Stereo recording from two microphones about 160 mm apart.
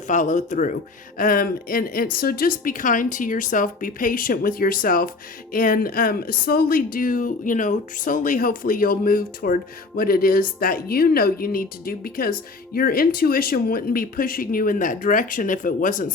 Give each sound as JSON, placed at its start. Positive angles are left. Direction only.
{"t": 0.1, "sound": "a woman's voice", "side_deg": 50}